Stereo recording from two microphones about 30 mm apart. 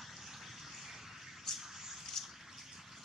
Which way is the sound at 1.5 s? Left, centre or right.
Centre.